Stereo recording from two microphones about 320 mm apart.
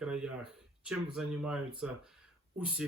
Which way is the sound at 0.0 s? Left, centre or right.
Centre.